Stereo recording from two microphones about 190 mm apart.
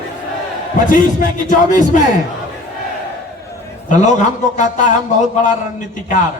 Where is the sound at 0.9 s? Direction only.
45° left (ahead or behind).